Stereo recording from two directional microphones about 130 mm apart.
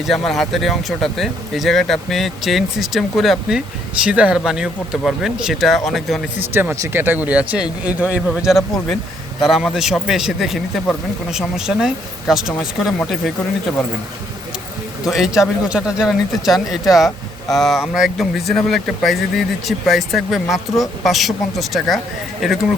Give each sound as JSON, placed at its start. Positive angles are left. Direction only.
{"t": 0.0, "sound": "speech", "side_deg": 0}
{"t": 6.5, "sound": "speech", "side_deg": -15}
{"t": 15.0, "sound": "speech", "side_deg": -5}